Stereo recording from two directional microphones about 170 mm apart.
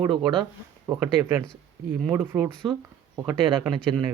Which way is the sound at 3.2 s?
10° right (ahead or behind).